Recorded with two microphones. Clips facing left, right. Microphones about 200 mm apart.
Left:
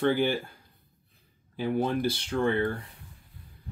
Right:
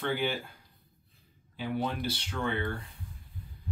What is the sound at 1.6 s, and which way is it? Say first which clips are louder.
Speech: left 6 dB; 50° left (ahead or behind).